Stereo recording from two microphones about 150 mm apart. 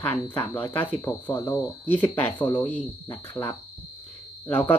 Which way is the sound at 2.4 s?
25° left (ahead or behind).